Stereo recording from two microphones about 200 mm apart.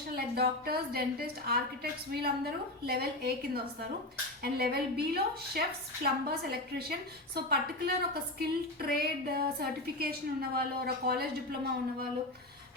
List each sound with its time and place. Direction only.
0.3 s a woman's voice: 50° right (ahead or behind)